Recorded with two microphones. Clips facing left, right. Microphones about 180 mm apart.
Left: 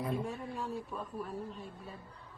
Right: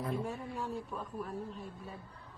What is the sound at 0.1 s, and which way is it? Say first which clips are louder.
A man's voice: even; centre (ahead or behind).